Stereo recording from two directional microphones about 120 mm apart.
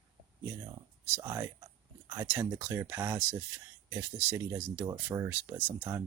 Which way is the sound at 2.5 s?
15° right (ahead or behind).